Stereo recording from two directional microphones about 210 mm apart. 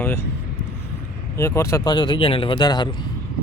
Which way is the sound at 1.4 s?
15° left (ahead or behind).